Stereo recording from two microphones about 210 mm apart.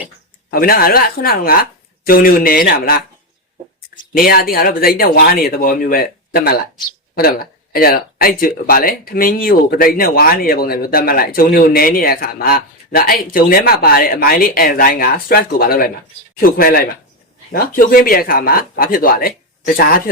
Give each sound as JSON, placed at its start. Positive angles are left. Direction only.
{"t": 0.5, "sound": "speech", "side_deg": 45}